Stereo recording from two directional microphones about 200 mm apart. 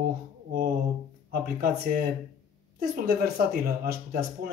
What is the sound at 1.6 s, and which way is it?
Speech, 45° right (ahead or behind).